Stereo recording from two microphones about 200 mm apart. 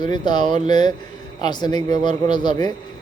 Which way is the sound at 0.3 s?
20° left (ahead or behind).